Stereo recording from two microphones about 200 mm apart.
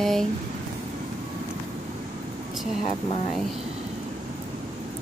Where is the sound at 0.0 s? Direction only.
Centre (ahead or behind).